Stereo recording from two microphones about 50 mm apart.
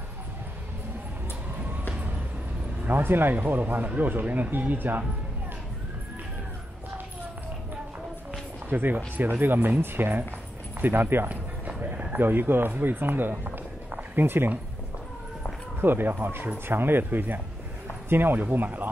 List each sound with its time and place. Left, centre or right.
2.8 s speech: right
8.6 s speech: right
11.2 s speech: right
15.8 s speech: right